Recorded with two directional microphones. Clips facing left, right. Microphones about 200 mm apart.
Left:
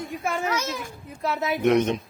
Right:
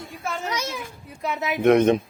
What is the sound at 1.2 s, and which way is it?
Speech, 15° right (ahead or behind).